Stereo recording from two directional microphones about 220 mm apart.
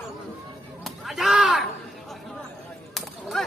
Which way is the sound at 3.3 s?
Centre (ahead or behind).